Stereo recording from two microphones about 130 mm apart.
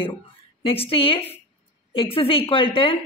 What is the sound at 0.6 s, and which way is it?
Speech, 45° left (ahead or behind).